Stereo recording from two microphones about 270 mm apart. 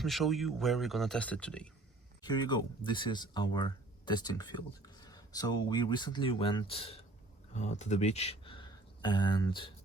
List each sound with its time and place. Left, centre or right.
0.0 s speech: centre
2.2 s speech: centre